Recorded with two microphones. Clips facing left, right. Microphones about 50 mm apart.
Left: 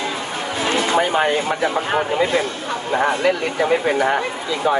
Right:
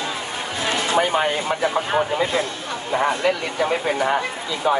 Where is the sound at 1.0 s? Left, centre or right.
Centre.